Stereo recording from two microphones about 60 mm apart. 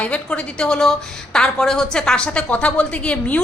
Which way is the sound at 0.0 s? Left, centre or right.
Left.